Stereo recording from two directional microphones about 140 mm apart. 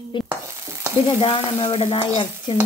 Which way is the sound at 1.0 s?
35° left (ahead or behind).